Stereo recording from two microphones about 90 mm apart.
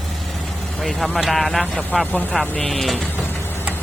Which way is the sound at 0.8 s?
Centre (ahead or behind).